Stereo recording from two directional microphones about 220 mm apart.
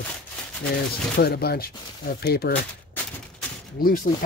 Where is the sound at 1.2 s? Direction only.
45° left (ahead or behind).